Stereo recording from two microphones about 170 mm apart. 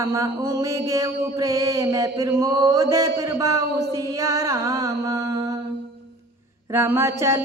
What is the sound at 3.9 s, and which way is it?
Music, 20° right (ahead or behind).